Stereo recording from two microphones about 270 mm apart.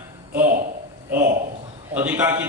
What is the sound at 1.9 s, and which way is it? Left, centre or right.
Speech, centre.